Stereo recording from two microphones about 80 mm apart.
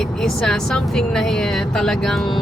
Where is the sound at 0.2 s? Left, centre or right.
Centre.